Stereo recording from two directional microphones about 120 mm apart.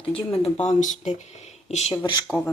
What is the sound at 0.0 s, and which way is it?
Speech, 50° left (ahead or behind).